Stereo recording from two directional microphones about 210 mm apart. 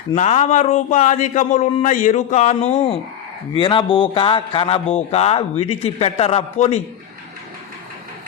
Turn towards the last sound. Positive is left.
turn(degrees=30)  # may be behind; listen again after turning